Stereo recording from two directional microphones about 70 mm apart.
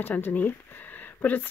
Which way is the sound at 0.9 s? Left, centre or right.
Left.